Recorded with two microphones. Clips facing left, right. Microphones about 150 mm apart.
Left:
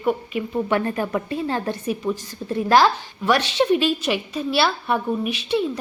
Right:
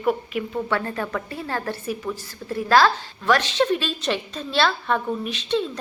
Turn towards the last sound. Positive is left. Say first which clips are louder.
# left 2 dB
turn(degrees=10)  # may be behind; listen again after turning